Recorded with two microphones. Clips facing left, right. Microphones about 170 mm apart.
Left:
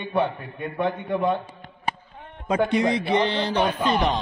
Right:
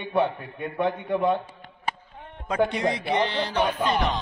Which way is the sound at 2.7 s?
15° left (ahead or behind).